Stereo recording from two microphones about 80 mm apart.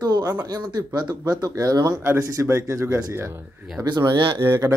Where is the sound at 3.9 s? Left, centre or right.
Right.